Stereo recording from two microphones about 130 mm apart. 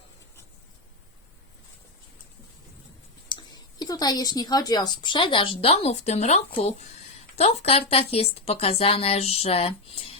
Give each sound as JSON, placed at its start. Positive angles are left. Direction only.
{"t": 3.2, "sound": "a woman's voice", "side_deg": 35}